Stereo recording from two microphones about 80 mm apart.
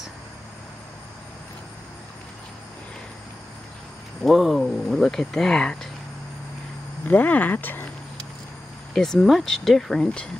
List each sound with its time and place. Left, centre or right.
4.2 s speech: centre
7.1 s speech: left
8.9 s speech: centre